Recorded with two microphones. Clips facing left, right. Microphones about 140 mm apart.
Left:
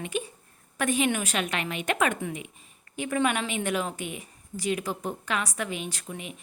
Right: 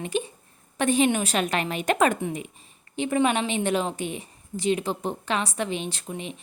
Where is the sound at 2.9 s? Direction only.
25° right (ahead or behind).